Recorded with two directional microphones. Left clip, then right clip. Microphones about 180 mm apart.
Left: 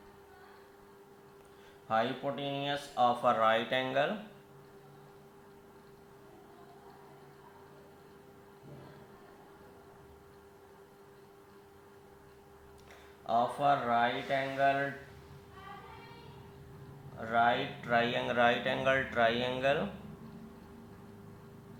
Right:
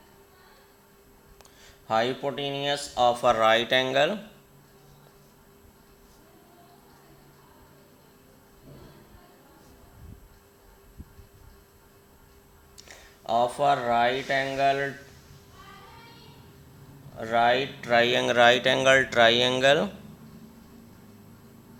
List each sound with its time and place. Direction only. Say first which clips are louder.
1.9 s speech: right 6 dB; 45° right (ahead or behind)
13.2 s a sound: right 6 dB; 45° right (ahead or behind)
17.2 s speech: right 6 dB; 40° right (ahead or behind)